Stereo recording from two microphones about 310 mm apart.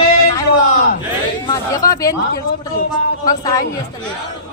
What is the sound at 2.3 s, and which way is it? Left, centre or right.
Speech, left.